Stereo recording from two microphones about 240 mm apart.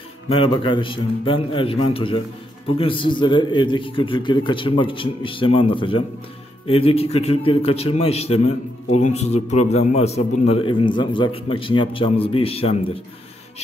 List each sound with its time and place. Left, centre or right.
0.3 s a man's voice: left